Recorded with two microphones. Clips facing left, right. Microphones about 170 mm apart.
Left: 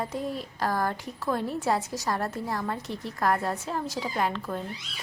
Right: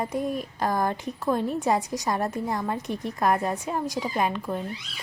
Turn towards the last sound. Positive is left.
turn(degrees=-15)  # may be behind; listen again after turning